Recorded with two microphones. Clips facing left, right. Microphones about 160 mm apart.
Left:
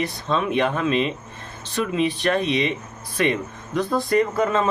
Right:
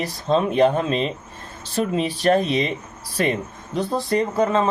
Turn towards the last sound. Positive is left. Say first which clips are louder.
# even
turn(degrees=-30)  # may be behind; listen again after turning